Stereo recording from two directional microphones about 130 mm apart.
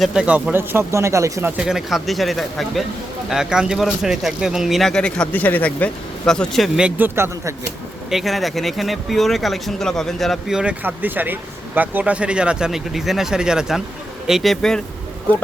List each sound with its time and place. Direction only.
0.0 s speech: 5° right (ahead or behind)
1.5 s speech: 5° right (ahead or behind)
8.1 s speech: centre (ahead or behind)